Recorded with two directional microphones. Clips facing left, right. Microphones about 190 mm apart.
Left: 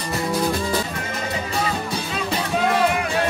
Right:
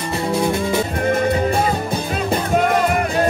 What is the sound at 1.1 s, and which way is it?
Music, 50° right (ahead or behind).